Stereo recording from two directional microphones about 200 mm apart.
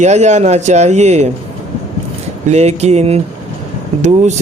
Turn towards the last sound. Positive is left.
turn(degrees=-35)  # may be behind; listen again after turning